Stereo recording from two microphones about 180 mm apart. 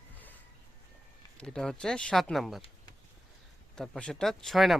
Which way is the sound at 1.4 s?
5° left (ahead or behind).